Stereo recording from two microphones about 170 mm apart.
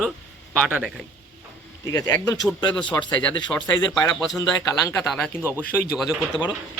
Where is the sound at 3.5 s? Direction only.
5° left (ahead or behind).